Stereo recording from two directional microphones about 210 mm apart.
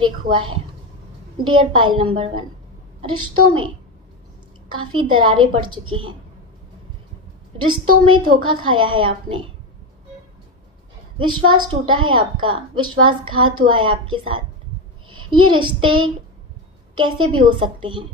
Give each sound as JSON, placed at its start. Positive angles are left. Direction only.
{"t": 0.0, "sound": "a woman's voice", "side_deg": -25}
{"t": 5.0, "sound": "a woman's voice", "side_deg": -20}
{"t": 7.5, "sound": "a woman's voice", "side_deg": -20}
{"t": 11.1, "sound": "a woman's voice", "side_deg": -20}